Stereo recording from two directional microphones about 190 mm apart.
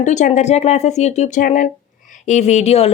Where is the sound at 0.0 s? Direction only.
40° left (ahead or behind).